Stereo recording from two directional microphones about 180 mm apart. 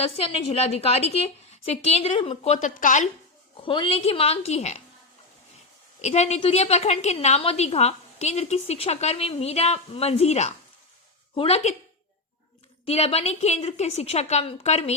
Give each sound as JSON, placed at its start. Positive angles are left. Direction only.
{"t": 0.0, "sound": "a woman's voice", "side_deg": 35}
{"t": 3.6, "sound": "a woman's voice", "side_deg": 30}
{"t": 6.0, "sound": "a woman's voice", "side_deg": 40}
{"t": 12.8, "sound": "a woman's voice", "side_deg": 35}